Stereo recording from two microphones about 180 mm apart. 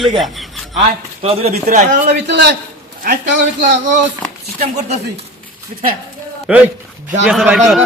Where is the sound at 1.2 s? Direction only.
35° right (ahead or behind).